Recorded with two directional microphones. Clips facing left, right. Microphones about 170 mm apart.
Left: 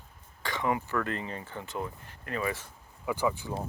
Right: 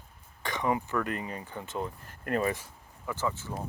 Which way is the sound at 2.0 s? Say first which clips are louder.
Right 5 dB; 50° right (ahead or behind).